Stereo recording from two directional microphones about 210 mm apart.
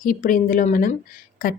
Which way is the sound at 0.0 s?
40° left (ahead or behind).